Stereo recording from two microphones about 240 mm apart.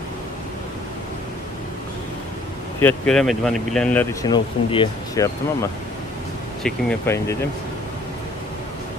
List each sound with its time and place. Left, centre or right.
2.8 s speech: centre
4.2 s speech: centre
6.6 s speech: centre